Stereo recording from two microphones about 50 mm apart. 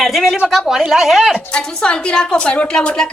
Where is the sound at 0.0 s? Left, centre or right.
Centre.